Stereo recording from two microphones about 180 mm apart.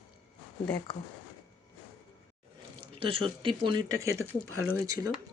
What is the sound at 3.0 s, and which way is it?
Speech, 30° right (ahead or behind).